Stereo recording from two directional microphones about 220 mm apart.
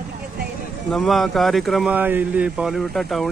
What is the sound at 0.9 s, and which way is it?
Speech, centre (ahead or behind).